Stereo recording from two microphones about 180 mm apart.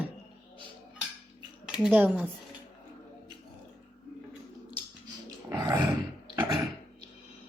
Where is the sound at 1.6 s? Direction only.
5° right (ahead or behind).